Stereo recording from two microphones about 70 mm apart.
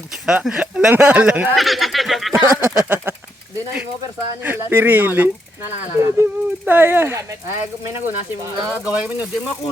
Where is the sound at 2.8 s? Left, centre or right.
Right.